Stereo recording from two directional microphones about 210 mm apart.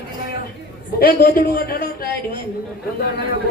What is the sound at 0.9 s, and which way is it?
Speech, 45° left (ahead or behind).